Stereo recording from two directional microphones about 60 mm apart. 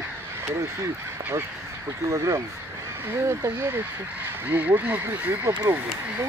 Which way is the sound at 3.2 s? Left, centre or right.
Right.